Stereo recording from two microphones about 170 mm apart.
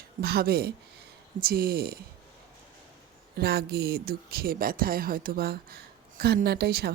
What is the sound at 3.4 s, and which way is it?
Speech, 65° right (ahead or behind).